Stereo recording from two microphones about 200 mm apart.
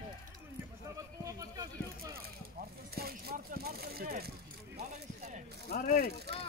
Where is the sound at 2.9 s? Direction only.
50° right (ahead or behind).